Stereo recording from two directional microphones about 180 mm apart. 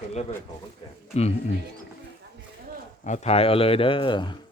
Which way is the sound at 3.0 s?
40° left (ahead or behind).